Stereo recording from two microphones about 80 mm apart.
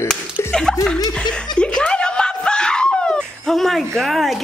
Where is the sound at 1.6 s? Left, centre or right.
Centre.